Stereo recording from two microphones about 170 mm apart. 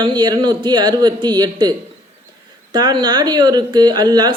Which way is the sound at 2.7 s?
25° right (ahead or behind).